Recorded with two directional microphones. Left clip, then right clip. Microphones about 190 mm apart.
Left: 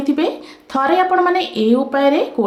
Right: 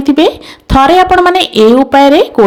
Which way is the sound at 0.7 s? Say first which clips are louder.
Right 9 dB; 45° right (ahead or behind).